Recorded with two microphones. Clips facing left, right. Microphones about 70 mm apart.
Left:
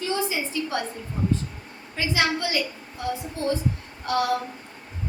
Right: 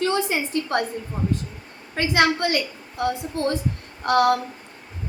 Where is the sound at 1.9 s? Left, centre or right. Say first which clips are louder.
Right 5 dB; right.